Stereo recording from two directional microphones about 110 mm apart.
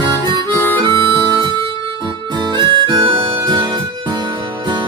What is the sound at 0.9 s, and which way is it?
Harmonica, 45° right (ahead or behind).